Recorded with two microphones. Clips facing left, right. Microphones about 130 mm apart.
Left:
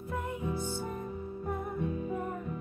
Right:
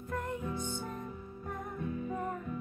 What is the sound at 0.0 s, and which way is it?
Music, 5° left (ahead or behind).